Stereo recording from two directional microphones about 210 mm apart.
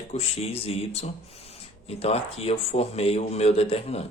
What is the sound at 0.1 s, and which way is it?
Speech, 30° left (ahead or behind).